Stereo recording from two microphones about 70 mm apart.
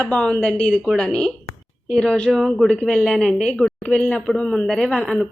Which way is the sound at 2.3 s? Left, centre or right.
Centre.